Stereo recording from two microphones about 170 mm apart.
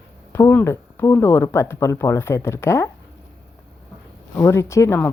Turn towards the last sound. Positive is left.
turn(degrees=15)  # may be behind; listen again after turning